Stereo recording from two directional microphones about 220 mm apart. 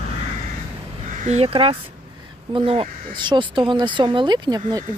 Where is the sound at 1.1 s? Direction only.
30° right (ahead or behind).